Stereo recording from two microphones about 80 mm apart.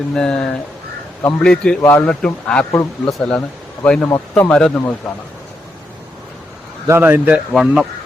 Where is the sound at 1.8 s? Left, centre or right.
Left.